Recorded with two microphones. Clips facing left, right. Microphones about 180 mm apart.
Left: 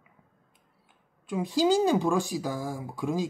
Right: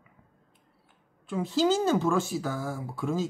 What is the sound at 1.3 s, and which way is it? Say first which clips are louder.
Speech: left 1 dB; 15° left (ahead or behind).